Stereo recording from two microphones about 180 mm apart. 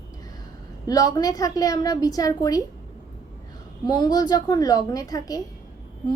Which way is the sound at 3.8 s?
25° left (ahead or behind).